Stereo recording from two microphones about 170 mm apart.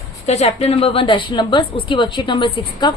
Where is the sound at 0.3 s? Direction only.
40° left (ahead or behind).